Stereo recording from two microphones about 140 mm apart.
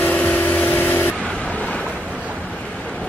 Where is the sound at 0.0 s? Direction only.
10° left (ahead or behind).